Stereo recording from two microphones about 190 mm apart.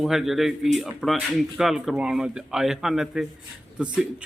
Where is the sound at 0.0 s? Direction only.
Centre (ahead or behind).